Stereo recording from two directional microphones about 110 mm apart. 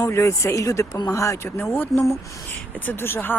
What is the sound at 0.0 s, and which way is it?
Speech, 25° left (ahead or behind).